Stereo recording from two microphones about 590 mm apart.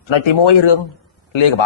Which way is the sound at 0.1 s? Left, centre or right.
Left.